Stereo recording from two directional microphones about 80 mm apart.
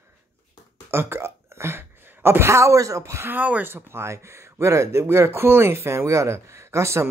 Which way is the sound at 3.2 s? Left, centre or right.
Right.